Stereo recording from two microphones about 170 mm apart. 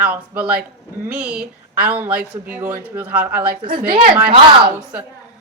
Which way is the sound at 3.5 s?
60° right (ahead or behind).